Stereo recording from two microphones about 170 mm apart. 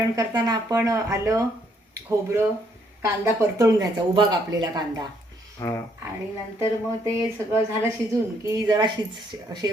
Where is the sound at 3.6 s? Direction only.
20° right (ahead or behind).